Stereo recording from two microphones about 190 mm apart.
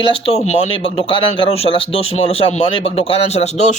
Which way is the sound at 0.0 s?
30° left (ahead or behind).